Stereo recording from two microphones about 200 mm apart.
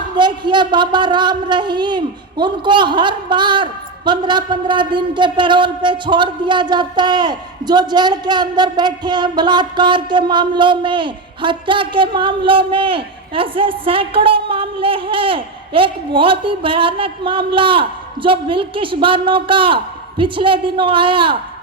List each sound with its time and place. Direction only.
0.2 s a woman's voice: 25° right (ahead or behind)